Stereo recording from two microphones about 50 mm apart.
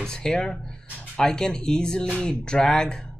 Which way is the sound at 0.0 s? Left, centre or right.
Centre.